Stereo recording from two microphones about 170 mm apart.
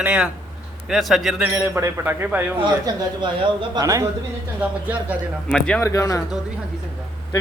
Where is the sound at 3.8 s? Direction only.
20° right (ahead or behind).